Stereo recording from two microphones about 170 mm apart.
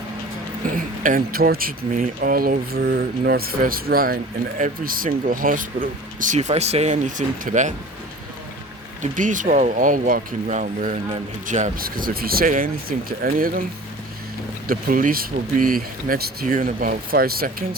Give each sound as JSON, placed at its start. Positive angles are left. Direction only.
{"t": 0.6, "sound": "speech", "side_deg": -55}
{"t": 9.0, "sound": "speech", "side_deg": -50}
{"t": 14.7, "sound": "speech", "side_deg": -55}